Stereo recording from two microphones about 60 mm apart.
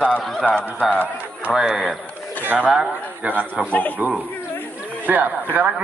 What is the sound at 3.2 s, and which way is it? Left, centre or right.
Speech, right.